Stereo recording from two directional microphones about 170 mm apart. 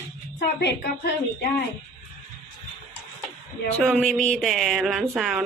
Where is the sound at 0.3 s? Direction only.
70° left (ahead or behind).